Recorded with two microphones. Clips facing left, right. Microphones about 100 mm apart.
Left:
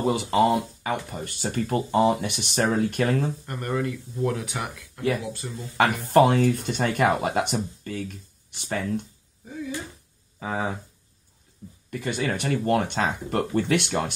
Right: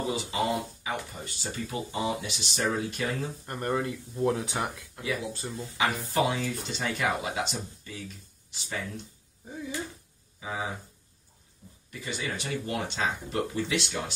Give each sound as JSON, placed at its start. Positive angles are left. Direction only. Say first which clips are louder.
{"t": 0.0, "sound": "speech", "louder": "left 8 dB", "side_deg": 55}
{"t": 3.4, "sound": "speech", "louder": "left 2 dB", "side_deg": -25}
{"t": 5.8, "sound": "speech", "louder": "left 9 dB", "side_deg": 55}
{"t": 10.4, "sound": "speech", "louder": "left 6 dB", "side_deg": 55}
{"t": 11.9, "sound": "speech", "louder": "left 8 dB", "side_deg": 55}